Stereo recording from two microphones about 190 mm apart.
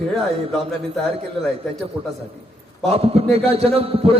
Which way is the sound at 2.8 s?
30° right (ahead or behind).